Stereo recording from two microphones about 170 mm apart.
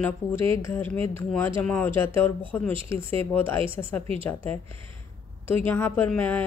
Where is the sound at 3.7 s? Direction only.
15° left (ahead or behind).